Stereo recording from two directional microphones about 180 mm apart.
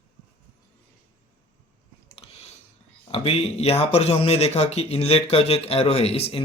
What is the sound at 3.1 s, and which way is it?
Speech, 35° left (ahead or behind).